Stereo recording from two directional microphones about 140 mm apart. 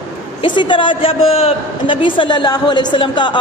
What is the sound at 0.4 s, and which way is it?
Speech, 35° left (ahead or behind).